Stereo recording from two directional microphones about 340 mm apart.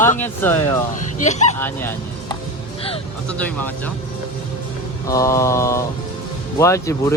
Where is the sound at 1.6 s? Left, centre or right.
Centre.